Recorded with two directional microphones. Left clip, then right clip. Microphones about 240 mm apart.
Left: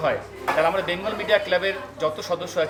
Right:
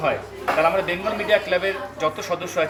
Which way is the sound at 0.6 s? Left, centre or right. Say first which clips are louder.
Right 2 dB; centre.